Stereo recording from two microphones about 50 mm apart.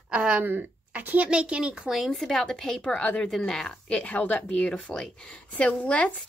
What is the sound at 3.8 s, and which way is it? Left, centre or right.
Speech, left.